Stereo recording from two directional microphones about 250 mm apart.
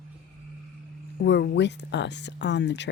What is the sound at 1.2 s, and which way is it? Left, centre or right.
Speech, left.